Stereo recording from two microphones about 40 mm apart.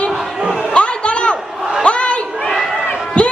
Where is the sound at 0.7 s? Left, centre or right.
Left.